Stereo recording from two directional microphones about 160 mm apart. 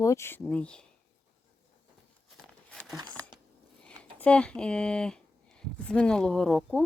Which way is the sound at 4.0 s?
10° left (ahead or behind).